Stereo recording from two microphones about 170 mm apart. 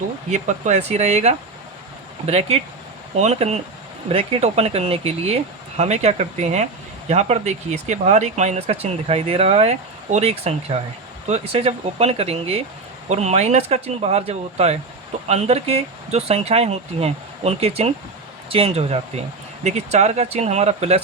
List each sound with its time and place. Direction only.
0.3 s speech: 45° right (ahead or behind)